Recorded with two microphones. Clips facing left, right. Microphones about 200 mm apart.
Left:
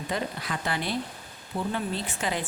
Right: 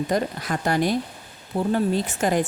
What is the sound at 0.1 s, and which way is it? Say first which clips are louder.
Speech: right 7 dB; 45° right (ahead or behind).